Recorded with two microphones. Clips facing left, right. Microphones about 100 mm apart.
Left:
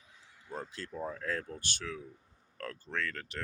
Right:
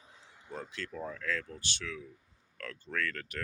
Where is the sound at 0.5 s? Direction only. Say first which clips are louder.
Even; 35° left (ahead or behind).